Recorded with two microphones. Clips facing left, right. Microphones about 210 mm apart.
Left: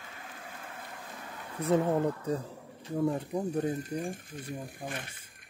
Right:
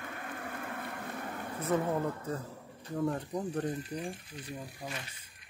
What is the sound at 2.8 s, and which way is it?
Speech, 5° left (ahead or behind).